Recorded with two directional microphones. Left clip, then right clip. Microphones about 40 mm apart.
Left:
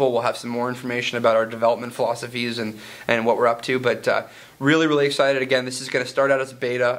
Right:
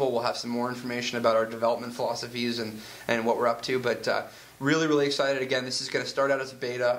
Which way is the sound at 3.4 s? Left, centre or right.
Centre.